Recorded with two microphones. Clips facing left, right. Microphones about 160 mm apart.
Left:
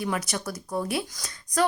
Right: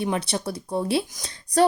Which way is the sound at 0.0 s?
25° right (ahead or behind).